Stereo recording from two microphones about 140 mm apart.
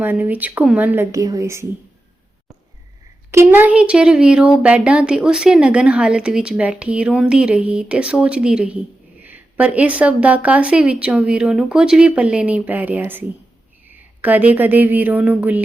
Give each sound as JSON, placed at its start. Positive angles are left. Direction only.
{"t": 0.0, "sound": "speech", "side_deg": -15}
{"t": 1.1, "sound": "a woman's voice", "side_deg": -25}
{"t": 3.3, "sound": "speech", "side_deg": -15}